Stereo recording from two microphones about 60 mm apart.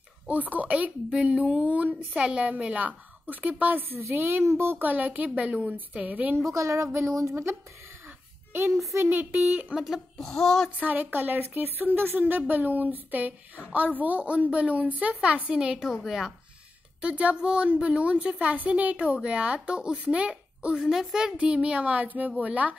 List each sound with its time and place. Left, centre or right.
0.3 s a woman's voice: right
3.7 s a woman's voice: right
4.4 s a child's voice: right
4.8 s a woman's voice: right
6.5 s speech: right
9.0 s a woman's voice: right
9.8 s a woman's voice: centre
10.2 s a sound: centre
10.8 s a woman's voice: right
15.8 s a woman's voice: centre
17.0 s a woman's voice: right